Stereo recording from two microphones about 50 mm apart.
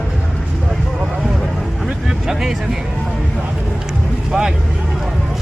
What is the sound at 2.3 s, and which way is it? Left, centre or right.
Speech, centre.